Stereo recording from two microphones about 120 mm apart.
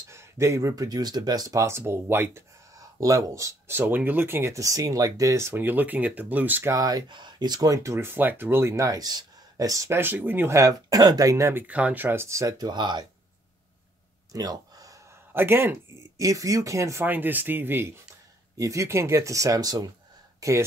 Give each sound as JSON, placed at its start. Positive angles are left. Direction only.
{"t": 0.1, "sound": "speech", "side_deg": -25}
{"t": 6.7, "sound": "speech", "side_deg": -30}
{"t": 14.3, "sound": "a sound", "side_deg": -30}
{"t": 15.3, "sound": "speech", "side_deg": -20}
{"t": 16.2, "sound": "speech", "side_deg": -30}